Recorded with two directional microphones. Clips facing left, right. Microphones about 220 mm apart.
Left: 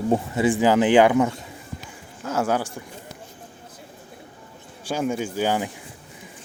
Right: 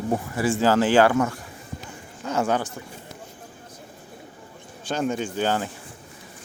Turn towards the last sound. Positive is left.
turn(degrees=10)  # may be behind; listen again after turning